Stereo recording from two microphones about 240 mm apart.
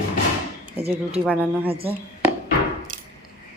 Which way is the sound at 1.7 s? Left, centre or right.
Right.